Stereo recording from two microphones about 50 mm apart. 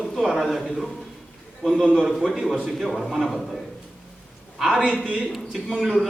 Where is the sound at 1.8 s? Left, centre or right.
Centre.